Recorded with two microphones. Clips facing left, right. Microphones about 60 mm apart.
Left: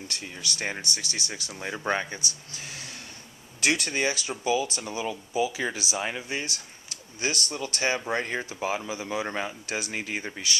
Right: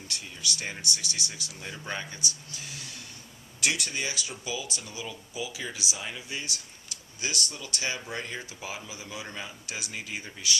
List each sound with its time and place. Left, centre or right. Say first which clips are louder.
0.1 s speech: right 2 dB; left
6.0 s speech: left 7 dB; left
6.2 s speech: left 5 dB; left